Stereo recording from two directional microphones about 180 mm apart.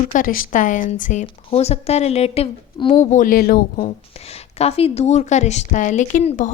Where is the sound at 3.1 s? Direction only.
50° left (ahead or behind).